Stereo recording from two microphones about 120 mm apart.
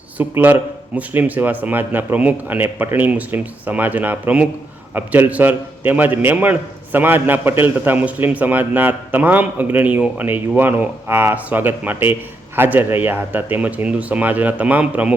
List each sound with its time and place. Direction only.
0.2 s a man's voice: 15° right (ahead or behind)